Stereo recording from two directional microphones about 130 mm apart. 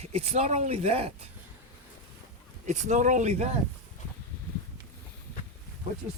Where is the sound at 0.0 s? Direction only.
55° right (ahead or behind).